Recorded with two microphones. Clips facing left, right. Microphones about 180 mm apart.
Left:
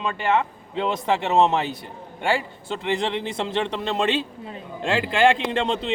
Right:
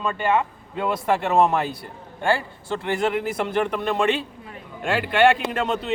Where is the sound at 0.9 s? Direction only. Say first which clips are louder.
Right 1 dB; 20° left (ahead or behind).